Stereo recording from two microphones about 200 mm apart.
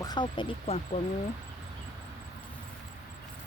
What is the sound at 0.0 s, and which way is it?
Speech, 20° left (ahead or behind).